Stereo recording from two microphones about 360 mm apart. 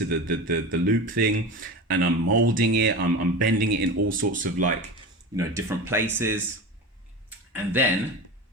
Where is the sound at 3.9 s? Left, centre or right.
Right.